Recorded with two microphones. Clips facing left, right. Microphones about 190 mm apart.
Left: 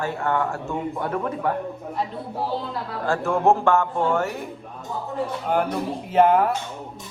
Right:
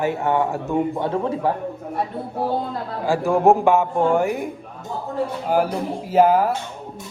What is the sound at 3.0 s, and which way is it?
A man's voice, 15° right (ahead or behind).